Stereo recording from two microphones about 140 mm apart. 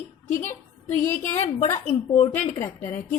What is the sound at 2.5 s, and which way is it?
Speech, 20° left (ahead or behind).